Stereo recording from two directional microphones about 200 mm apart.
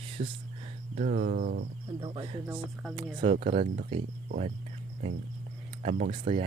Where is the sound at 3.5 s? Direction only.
50° right (ahead or behind).